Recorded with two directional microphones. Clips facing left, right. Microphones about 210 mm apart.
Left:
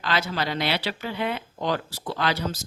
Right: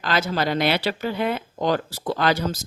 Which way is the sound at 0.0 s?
45° right (ahead or behind).